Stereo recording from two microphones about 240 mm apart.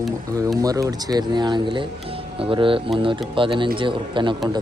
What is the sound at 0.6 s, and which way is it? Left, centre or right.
A man's voice, centre.